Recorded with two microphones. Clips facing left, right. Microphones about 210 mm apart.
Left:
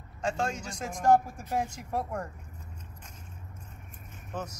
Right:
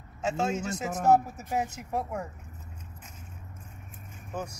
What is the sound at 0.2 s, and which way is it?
A man's voice, 5° right (ahead or behind).